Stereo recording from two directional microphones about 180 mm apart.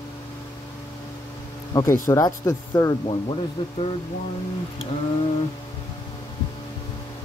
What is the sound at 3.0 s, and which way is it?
Speech, 30° left (ahead or behind).